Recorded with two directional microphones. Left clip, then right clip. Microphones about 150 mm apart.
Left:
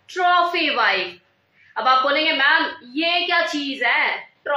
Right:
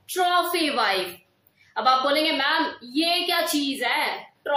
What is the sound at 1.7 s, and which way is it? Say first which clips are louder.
A woman's voice: left 3 dB; 45° right (ahead or behind).